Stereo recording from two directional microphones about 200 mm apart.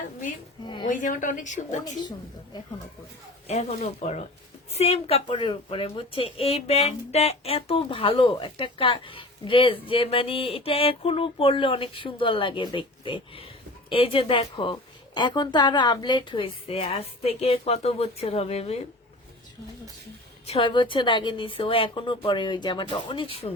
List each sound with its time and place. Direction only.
0.9 s a woman's voice: 40° left (ahead or behind)
1.8 s a woman's voice: 20° left (ahead or behind)
3.4 s a woman's voice: 35° left (ahead or behind)
20.5 s a woman's voice: 25° left (ahead or behind)